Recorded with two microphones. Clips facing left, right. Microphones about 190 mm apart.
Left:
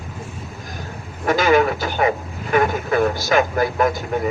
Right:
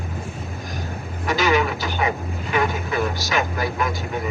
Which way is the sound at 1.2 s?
50° left (ahead or behind).